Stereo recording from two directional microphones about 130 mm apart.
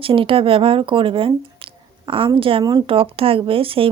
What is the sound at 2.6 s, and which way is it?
Speech, 30° right (ahead or behind).